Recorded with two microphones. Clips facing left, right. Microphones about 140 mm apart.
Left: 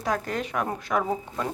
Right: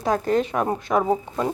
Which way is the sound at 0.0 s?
30° right (ahead or behind).